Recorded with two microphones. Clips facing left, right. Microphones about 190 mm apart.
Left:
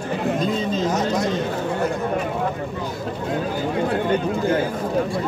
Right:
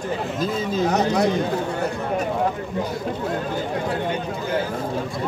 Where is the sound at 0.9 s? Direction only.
65° right (ahead or behind).